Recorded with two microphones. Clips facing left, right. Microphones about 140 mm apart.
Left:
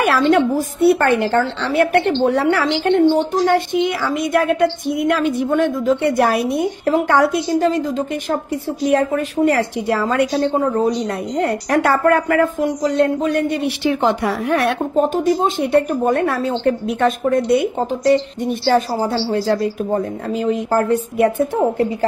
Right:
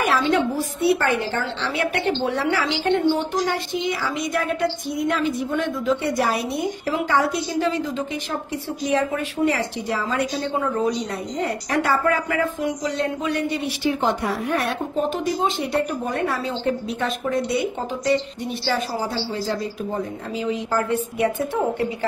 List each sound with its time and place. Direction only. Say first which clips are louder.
0.2 s a woman's voice: left 6 dB; 50° left (ahead or behind)
10.6 s a woman's voice: left 5 dB; 35° left (ahead or behind); by 14.7 s 75° left (ahead or behind)
15.0 s a woman's voice: left 7 dB; 45° left (ahead or behind)